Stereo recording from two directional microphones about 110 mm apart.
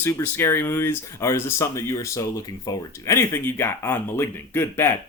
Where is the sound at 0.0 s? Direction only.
20° left (ahead or behind).